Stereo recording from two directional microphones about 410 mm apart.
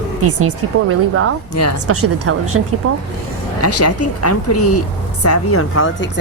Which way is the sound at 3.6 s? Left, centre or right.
Left.